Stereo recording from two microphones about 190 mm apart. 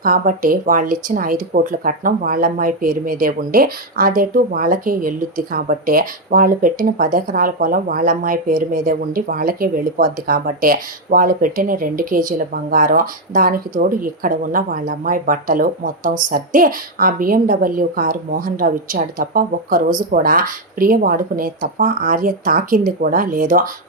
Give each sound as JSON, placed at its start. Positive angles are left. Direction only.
{"t": 0.0, "sound": "speech", "side_deg": -50}